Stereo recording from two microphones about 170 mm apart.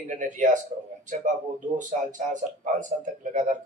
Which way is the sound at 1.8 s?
50° right (ahead or behind).